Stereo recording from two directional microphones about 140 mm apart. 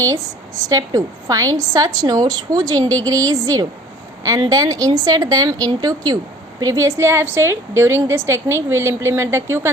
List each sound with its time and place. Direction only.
0.7 s a woman's voice: 25° right (ahead or behind)